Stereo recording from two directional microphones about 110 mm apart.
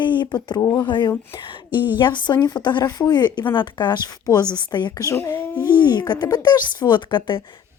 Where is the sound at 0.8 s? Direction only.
45° left (ahead or behind).